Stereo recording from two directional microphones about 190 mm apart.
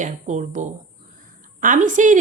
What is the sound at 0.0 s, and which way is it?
A woman's voice, 40° right (ahead or behind).